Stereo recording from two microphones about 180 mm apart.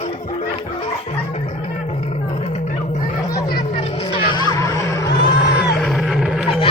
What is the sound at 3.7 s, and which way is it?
Vehicle, 30° left (ahead or behind).